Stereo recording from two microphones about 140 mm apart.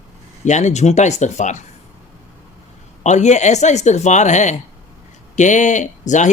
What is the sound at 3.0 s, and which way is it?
Speech, 55° left (ahead or behind).